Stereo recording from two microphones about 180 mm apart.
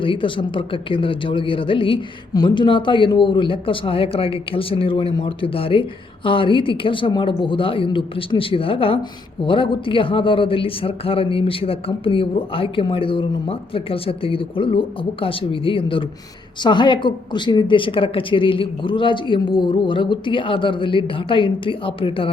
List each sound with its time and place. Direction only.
0.0 s a man's voice: 30° left (ahead or behind)